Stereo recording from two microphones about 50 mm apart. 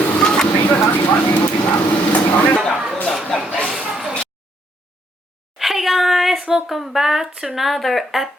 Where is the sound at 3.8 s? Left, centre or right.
Centre.